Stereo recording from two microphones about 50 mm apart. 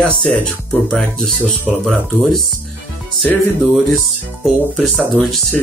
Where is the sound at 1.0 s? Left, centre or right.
Centre.